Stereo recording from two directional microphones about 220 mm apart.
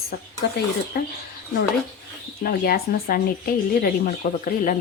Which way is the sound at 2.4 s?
45° left (ahead or behind).